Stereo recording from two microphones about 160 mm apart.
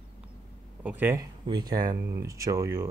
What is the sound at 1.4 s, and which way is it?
Speech, 25° right (ahead or behind).